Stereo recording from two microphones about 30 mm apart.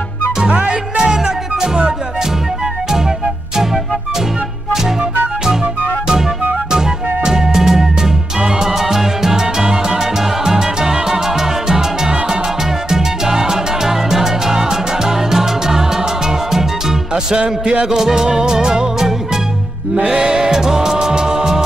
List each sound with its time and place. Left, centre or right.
0.5 s music: right
0.9 s music: right
6.7 s music: right
8.7 s music: centre
9.6 s music: right
10.1 s music: centre
17.1 s music: right
17.8 s music: centre